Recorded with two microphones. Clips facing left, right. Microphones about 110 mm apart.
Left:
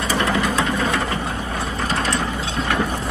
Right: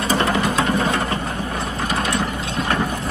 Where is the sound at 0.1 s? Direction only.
20° right (ahead or behind).